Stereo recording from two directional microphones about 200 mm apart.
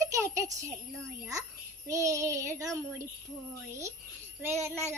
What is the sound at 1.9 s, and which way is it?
A child's voice, 15° right (ahead or behind).